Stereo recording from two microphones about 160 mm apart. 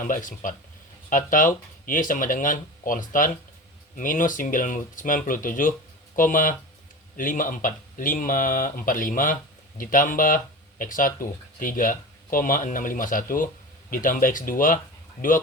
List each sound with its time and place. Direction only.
0.0 s speech: 55° left (ahead or behind)